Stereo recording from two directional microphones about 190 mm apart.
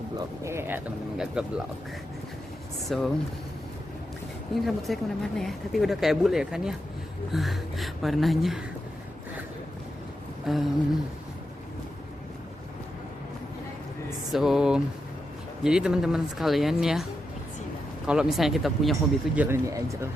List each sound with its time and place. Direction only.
0.2 s speech: 15° right (ahead or behind)
2.8 s speech: centre (ahead or behind)
4.5 s speech: centre (ahead or behind)
10.4 s a sound: centre (ahead or behind)
14.3 s speech: centre (ahead or behind)
19.4 s speech: 15° right (ahead or behind)